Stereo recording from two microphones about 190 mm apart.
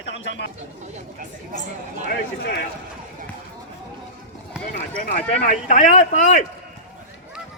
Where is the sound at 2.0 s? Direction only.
60° left (ahead or behind).